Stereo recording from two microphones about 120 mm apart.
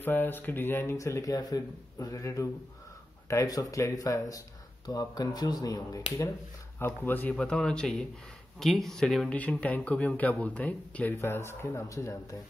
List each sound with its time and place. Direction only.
0.0 s speech: 15° left (ahead or behind)
7.0 s speech: 15° left (ahead or behind)